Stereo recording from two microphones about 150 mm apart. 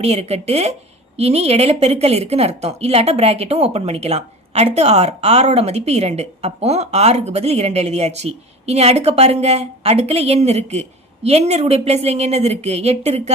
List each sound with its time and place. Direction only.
0.0 s a woman's voice: 45° right (ahead or behind)